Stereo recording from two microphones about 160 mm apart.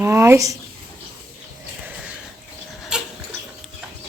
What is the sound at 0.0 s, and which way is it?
Speech, 15° right (ahead or behind).